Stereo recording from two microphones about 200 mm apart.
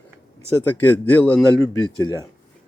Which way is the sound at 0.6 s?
10° left (ahead or behind).